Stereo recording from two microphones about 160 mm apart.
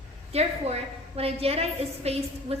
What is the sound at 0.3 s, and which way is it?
A woman's voice, 40° right (ahead or behind).